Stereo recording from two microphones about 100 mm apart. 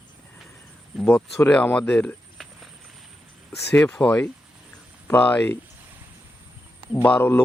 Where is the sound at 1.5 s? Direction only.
10° left (ahead or behind).